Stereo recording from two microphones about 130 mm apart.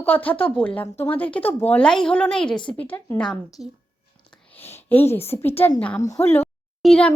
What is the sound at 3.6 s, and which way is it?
Speech, 55° right (ahead or behind).